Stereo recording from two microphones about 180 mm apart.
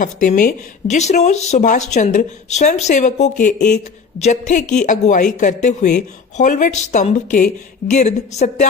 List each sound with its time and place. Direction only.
0.0 s speech: 45° left (ahead or behind)